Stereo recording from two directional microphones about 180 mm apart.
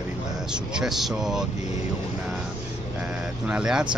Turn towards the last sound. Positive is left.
turn(degrees=-5)  # may be behind; listen again after turning